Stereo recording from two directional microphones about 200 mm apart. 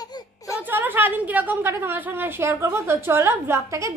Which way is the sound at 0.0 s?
20° left (ahead or behind).